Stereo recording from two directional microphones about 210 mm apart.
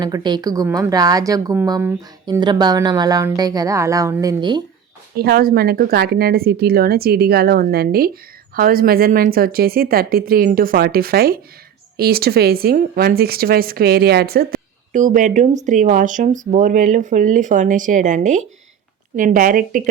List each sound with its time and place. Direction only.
0.0 s a woman's voice: 20° right (ahead or behind)
5.1 s speech: 50° right (ahead or behind)